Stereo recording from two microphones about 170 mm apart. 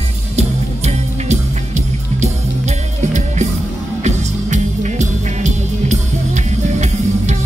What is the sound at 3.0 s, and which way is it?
Music, 45° right (ahead or behind).